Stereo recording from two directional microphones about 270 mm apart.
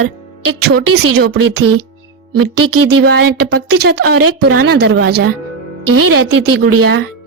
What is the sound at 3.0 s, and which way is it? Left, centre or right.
Speech, right.